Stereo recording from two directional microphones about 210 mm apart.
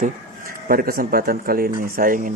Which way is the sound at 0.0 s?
45° right (ahead or behind).